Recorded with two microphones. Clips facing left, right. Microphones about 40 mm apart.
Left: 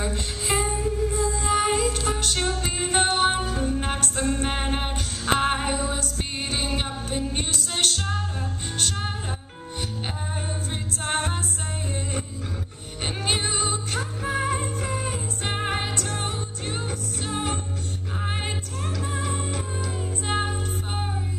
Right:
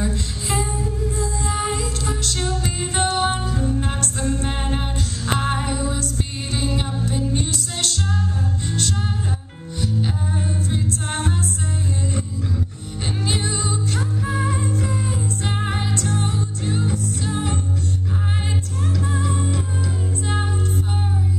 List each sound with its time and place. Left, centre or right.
0.0 s music: left
10.7 s a capella: left
13.2 s music: left
19.1 s music: left